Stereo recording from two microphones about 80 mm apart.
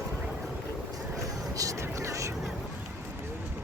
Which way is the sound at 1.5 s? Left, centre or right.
Right.